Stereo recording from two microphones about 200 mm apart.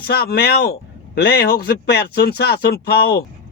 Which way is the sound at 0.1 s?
55° left (ahead or behind).